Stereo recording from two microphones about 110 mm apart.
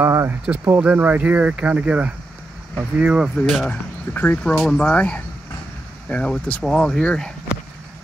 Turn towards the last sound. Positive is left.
turn(degrees=10)  # may be behind; listen again after turning